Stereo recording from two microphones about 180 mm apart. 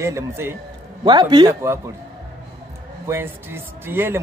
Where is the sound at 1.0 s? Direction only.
25° right (ahead or behind).